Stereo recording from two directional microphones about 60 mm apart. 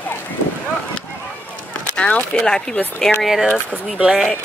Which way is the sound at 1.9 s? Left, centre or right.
Left.